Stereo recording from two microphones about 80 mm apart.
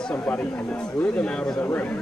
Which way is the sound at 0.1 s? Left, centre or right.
Left.